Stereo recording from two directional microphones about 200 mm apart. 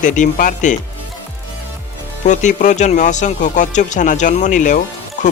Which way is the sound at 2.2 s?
35° left (ahead or behind).